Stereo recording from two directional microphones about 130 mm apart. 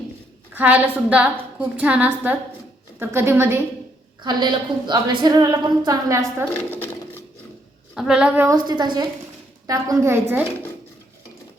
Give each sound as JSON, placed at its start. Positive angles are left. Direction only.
{"t": 0.5, "sound": "a woman's voice", "side_deg": -15}
{"t": 4.2, "sound": "a woman's voice", "side_deg": -35}
{"t": 6.7, "sound": "sewing machine", "side_deg": 15}
{"t": 7.9, "sound": "speech", "side_deg": -5}
{"t": 8.4, "sound": "a woman's voice", "side_deg": -35}